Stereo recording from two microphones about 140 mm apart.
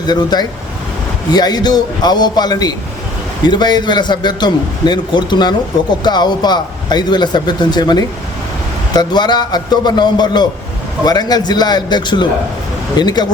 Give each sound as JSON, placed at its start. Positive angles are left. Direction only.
{"t": 0.1, "sound": "a man's voice", "side_deg": 30}